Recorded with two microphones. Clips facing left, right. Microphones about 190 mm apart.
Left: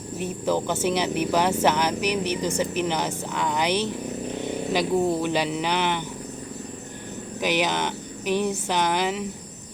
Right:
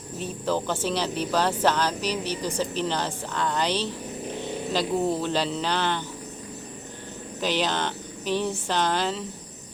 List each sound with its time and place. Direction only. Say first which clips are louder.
0.2 s speech: left 2 dB; 15° left (ahead or behind)
7.4 s speech: left 2 dB; 15° left (ahead or behind)